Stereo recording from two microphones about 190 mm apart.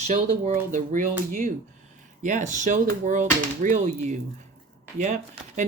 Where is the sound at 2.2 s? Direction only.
40° right (ahead or behind).